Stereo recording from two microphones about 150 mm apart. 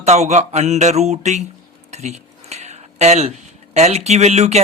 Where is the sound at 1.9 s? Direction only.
45° right (ahead or behind).